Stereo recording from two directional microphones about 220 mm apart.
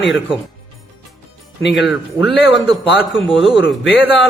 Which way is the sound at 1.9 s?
Centre (ahead or behind).